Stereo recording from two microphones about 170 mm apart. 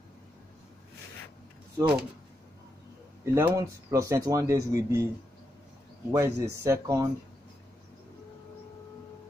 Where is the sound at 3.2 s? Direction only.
15° right (ahead or behind).